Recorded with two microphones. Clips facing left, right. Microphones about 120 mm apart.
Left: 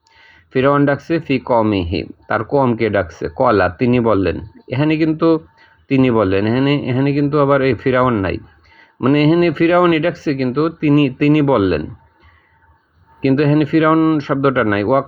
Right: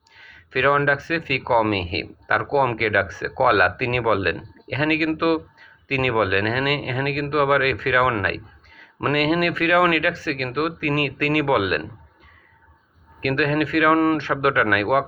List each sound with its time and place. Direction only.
0.2 s speech: 30° left (ahead or behind)
9.1 s speech: 30° left (ahead or behind)
13.1 s speech: 25° left (ahead or behind)